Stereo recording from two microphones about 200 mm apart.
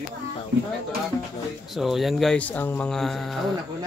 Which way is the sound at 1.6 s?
Centre (ahead or behind).